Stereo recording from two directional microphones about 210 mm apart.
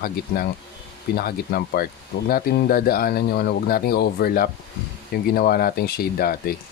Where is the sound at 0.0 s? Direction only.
45° left (ahead or behind).